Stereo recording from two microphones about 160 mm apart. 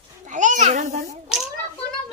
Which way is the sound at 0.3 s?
50° right (ahead or behind).